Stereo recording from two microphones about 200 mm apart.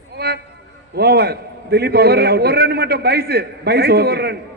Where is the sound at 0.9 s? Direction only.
55° right (ahead or behind).